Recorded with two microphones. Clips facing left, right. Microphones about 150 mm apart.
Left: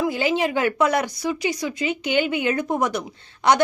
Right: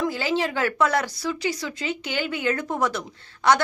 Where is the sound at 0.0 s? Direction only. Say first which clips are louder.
Left 3 dB; 15° left (ahead or behind).